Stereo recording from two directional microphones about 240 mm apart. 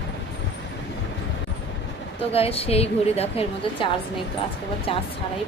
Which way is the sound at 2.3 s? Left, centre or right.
Left.